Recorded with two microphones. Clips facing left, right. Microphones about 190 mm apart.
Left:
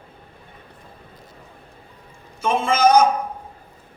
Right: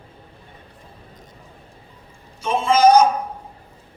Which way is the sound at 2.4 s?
55° left (ahead or behind).